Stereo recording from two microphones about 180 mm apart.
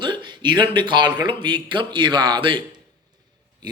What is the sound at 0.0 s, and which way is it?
A man's voice, 25° right (ahead or behind).